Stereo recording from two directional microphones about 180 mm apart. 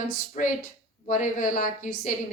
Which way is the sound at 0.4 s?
40° left (ahead or behind).